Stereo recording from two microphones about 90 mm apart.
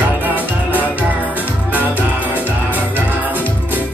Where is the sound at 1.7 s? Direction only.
20° right (ahead or behind).